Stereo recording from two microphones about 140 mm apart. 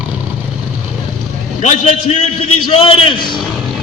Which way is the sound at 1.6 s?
55° left (ahead or behind).